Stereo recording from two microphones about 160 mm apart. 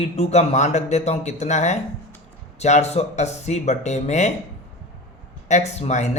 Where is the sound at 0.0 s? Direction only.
40° left (ahead or behind).